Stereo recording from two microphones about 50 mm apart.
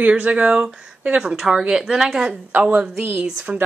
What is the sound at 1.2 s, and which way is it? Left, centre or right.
Speech, centre.